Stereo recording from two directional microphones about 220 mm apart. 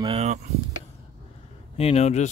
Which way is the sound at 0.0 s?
25° right (ahead or behind).